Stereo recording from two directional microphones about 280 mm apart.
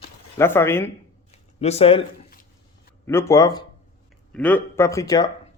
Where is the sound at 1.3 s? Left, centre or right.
Left.